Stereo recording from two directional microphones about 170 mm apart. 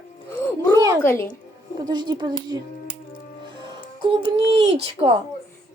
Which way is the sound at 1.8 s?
25° right (ahead or behind).